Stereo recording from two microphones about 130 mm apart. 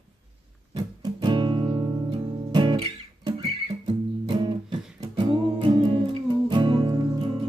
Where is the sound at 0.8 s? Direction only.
35° right (ahead or behind).